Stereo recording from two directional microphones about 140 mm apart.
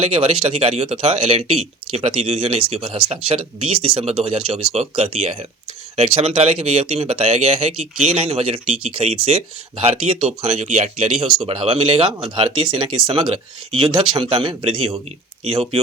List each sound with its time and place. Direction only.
0.0 s speech: 40° right (ahead or behind)